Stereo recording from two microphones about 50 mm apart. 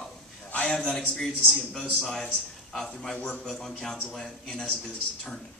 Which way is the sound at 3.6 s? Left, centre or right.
Centre.